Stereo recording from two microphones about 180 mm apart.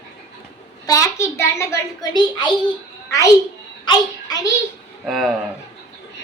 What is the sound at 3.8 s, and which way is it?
Speech, 25° left (ahead or behind).